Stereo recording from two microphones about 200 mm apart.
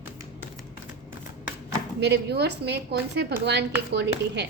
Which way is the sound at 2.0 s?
55° right (ahead or behind).